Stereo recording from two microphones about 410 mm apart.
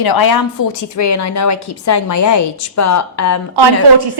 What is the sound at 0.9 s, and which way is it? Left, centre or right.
A woman's voice, left.